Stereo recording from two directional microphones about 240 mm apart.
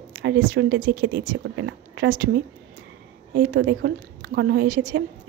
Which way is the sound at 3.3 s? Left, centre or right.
Right.